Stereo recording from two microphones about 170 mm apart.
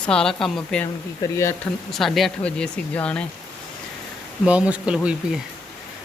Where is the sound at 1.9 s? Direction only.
Centre (ahead or behind).